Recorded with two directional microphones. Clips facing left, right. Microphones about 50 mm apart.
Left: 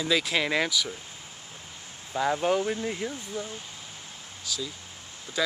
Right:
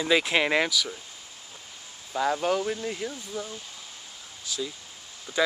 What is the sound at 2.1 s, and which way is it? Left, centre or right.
Speech, centre.